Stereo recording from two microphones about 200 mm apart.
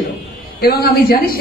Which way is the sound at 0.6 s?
50° left (ahead or behind).